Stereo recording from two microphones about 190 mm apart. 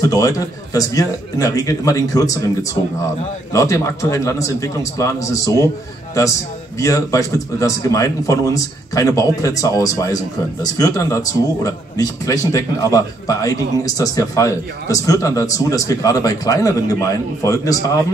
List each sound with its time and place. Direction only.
0.0 s a man's voice: 20° left (ahead or behind)
6.8 s a man's voice: 15° left (ahead or behind)